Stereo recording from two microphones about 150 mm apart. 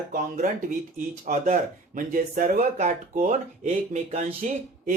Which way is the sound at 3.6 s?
45° right (ahead or behind).